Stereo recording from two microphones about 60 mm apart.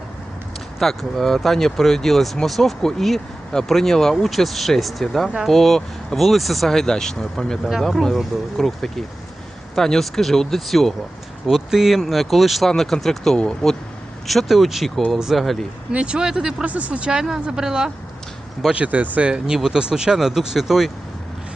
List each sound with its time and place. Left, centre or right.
0.8 s speech: centre
15.9 s speech: centre
16.6 s speech: right
18.7 s speech: right
19.5 s speech: centre